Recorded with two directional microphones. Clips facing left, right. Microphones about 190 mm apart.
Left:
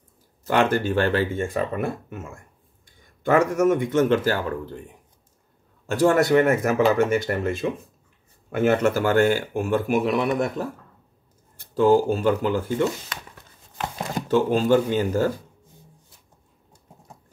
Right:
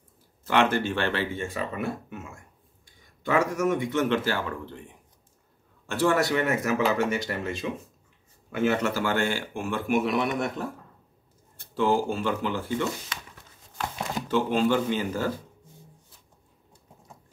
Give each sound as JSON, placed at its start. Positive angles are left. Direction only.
{"t": 0.5, "sound": "speech", "side_deg": 40}
{"t": 5.9, "sound": "speech", "side_deg": 40}
{"t": 11.7, "sound": "speech", "side_deg": 45}
{"t": 14.1, "sound": "speech", "side_deg": 40}